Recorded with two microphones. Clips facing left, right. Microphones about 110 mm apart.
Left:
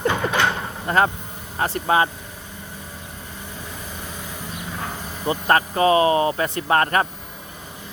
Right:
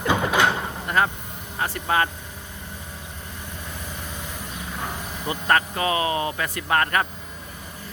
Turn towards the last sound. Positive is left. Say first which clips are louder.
# left 3 dB
turn(degrees=30)  # may be behind; listen again after turning